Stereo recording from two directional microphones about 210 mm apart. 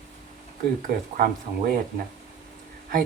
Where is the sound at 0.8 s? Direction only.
40° right (ahead or behind).